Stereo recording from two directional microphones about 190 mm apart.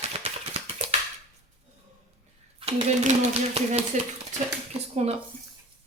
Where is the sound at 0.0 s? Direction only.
35° right (ahead or behind).